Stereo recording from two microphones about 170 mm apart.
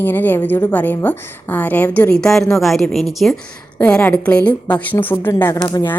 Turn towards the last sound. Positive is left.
turn(degrees=20)  # may be behind; listen again after turning